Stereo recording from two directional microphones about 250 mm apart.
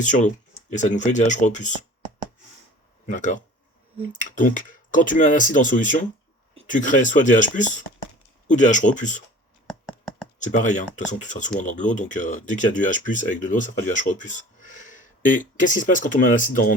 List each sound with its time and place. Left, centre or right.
0.0 s speech: left
3.1 s speech: left
9.6 s a sound: centre
10.4 s speech: left